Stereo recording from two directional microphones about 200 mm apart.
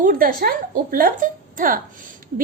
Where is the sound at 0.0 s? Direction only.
45° right (ahead or behind).